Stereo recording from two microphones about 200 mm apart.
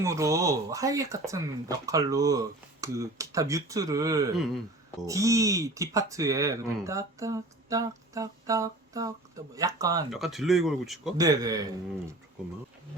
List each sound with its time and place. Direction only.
0.0 s speech: 15° right (ahead or behind)
4.4 s speech: centre (ahead or behind)
5.0 s speech: 15° right (ahead or behind)
10.1 s speech: centre (ahead or behind)
11.2 s speech: 20° right (ahead or behind)